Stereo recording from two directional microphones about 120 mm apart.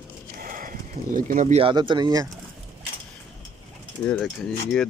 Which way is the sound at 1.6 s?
40° right (ahead or behind).